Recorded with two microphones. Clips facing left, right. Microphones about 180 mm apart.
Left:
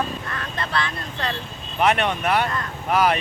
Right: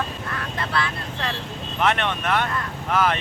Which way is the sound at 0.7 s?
5° right (ahead or behind).